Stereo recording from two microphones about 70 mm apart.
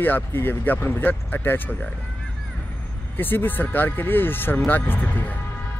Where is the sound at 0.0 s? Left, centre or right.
Left.